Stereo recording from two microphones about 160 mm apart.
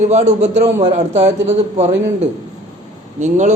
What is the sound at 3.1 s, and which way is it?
Speech, 50° right (ahead or behind).